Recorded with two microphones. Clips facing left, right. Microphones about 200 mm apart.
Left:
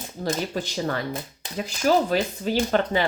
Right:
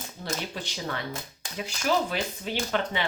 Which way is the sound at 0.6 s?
40° left (ahead or behind).